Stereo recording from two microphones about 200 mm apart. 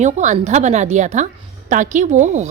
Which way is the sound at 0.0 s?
35° right (ahead or behind).